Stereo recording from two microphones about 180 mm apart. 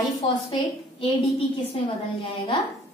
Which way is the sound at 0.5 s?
30° left (ahead or behind).